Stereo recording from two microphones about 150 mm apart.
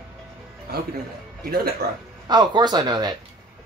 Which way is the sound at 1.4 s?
90° right.